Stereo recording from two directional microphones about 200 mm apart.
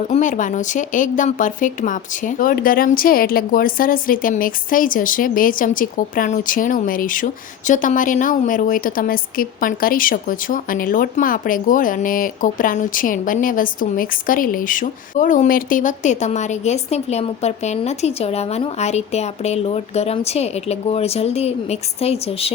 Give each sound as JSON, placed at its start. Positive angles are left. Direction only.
{"t": 0.1, "sound": "a woman's voice", "side_deg": 40}